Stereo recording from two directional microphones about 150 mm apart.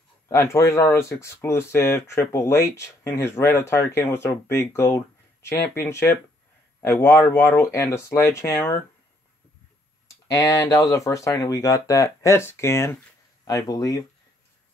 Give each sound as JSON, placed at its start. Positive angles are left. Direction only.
{"t": 0.3, "sound": "speech", "side_deg": 20}
{"t": 10.0, "sound": "speech", "side_deg": 25}